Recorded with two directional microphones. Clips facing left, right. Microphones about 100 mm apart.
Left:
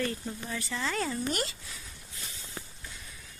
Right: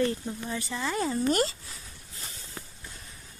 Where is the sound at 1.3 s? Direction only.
40° right (ahead or behind).